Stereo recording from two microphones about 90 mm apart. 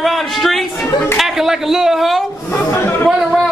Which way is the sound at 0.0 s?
Centre (ahead or behind).